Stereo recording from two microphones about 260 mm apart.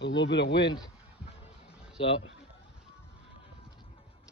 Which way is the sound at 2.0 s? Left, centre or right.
Left.